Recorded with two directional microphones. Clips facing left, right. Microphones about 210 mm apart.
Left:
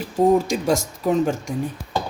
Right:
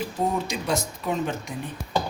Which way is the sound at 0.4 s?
45° left (ahead or behind).